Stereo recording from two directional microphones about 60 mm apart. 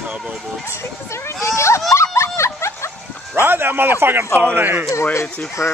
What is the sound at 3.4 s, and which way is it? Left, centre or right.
A man's voice, right.